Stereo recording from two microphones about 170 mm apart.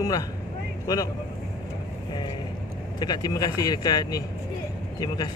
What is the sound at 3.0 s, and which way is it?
Speech, 25° left (ahead or behind).